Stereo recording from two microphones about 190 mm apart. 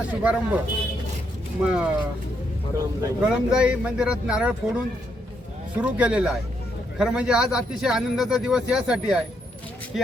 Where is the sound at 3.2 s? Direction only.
5° right (ahead or behind).